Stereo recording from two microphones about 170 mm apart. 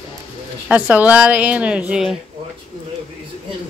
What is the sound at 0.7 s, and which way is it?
Speech, 10° right (ahead or behind).